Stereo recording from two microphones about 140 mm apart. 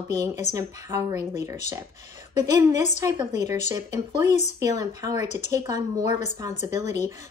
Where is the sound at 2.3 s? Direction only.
55° left (ahead or behind).